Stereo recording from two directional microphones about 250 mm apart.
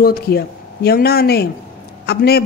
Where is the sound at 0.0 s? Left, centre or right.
Left.